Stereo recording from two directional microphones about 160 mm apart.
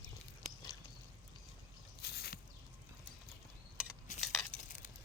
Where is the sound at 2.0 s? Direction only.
90° left.